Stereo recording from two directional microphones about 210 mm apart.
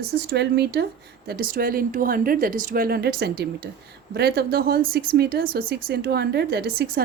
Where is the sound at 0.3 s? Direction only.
50° right (ahead or behind).